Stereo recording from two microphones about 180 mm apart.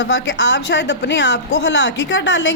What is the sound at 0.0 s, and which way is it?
A woman's voice, 80° left.